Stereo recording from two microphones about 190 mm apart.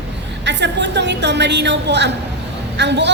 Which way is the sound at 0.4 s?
65° right (ahead or behind).